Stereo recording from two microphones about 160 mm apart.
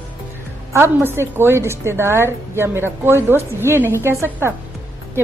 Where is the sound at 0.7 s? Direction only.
15° right (ahead or behind).